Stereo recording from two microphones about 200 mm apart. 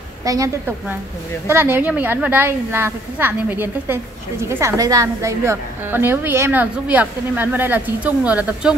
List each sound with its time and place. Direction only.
0.2 s a woman's voice: 15° right (ahead or behind)